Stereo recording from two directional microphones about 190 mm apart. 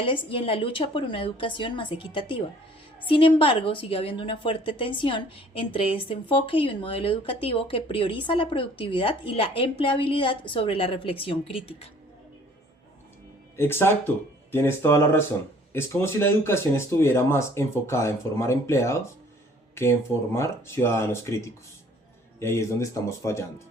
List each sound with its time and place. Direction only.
0.1 s a woman's voice: 30° left (ahead or behind)
13.6 s speech: 10° left (ahead or behind)